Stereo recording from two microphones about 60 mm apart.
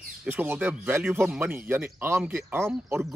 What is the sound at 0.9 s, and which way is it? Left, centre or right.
Speech, right.